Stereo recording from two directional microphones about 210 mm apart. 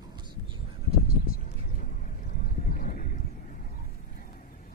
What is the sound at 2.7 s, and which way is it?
Horse, 40° left (ahead or behind).